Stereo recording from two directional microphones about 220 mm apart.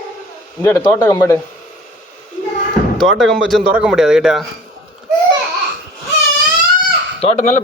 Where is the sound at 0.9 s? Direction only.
15° left (ahead or behind).